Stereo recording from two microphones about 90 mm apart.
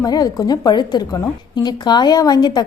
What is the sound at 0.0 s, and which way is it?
A woman's voice, 45° left (ahead or behind).